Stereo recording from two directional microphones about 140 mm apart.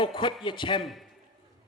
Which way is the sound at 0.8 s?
Centre (ahead or behind).